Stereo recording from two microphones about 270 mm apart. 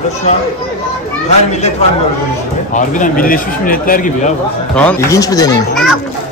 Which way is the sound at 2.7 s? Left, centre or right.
Left.